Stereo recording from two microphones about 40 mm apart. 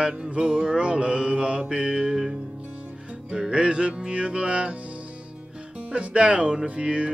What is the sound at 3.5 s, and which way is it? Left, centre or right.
Mantra, right.